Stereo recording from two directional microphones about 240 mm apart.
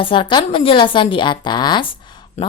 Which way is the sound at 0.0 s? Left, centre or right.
Left.